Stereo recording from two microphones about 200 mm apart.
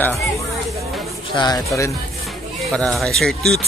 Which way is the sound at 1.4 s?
15° left (ahead or behind).